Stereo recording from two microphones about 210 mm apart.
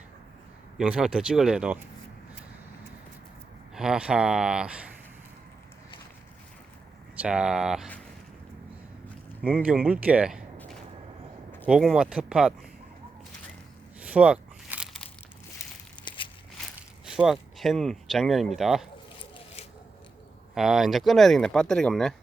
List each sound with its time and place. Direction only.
0.8 s speech: 5° right (ahead or behind)
3.8 s speech: 5° right (ahead or behind)
7.2 s speech: 5° right (ahead or behind)
9.6 s speech: 5° right (ahead or behind)
11.6 s speech: 5° right (ahead or behind)
14.0 s crumpling: 5° right (ahead or behind)
16.0 s walk: 25° left (ahead or behind)
17.1 s speech: 5° right (ahead or behind)
20.6 s speech: centre (ahead or behind)